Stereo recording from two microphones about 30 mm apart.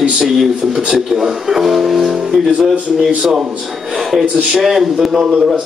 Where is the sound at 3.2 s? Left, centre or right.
Centre.